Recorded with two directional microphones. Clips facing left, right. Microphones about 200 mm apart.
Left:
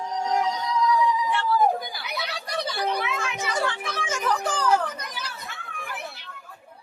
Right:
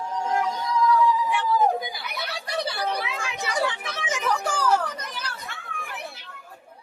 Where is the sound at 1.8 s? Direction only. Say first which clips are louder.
Right 2 dB; 20° right (ahead or behind).